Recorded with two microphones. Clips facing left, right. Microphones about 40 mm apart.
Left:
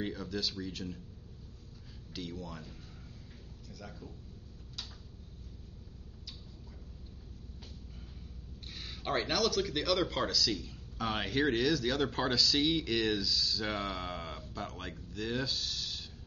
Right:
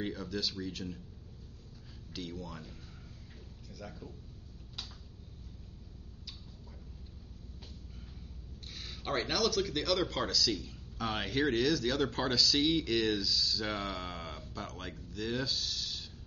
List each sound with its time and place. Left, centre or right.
0.0 s speech: centre
2.1 s speech: centre
8.7 s speech: centre